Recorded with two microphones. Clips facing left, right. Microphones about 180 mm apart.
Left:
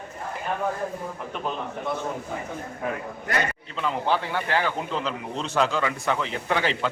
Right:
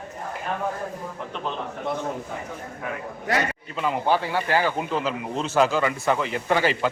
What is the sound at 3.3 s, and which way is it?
Speech, 90° right.